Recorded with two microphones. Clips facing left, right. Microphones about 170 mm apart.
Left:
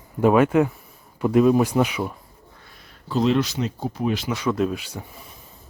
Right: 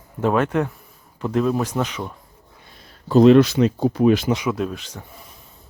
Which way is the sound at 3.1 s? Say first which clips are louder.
Right 9 dB; 60° right (ahead or behind).